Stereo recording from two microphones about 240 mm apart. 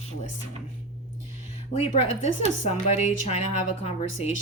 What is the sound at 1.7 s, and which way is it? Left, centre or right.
A woman's voice, left.